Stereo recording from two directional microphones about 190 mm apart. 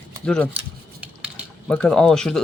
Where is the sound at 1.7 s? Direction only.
5° left (ahead or behind).